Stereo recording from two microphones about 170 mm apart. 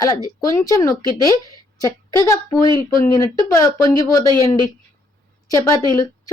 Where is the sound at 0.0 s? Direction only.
20° left (ahead or behind).